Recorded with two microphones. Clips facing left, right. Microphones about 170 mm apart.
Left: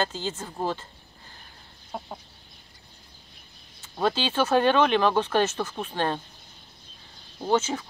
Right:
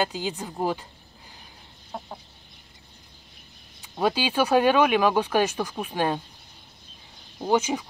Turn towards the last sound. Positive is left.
turn(degrees=-15)  # may be behind; listen again after turning